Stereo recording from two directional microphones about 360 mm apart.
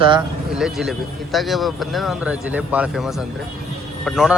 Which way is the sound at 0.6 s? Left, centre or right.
Centre.